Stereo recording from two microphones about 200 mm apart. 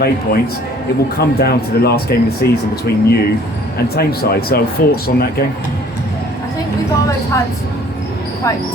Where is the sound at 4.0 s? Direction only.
50° left (ahead or behind).